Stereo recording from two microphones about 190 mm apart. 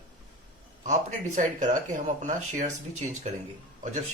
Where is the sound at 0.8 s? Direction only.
40° right (ahead or behind).